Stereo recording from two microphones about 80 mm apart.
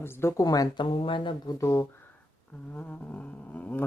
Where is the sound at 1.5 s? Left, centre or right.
Left.